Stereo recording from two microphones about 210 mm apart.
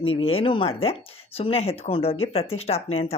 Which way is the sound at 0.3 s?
25° left (ahead or behind).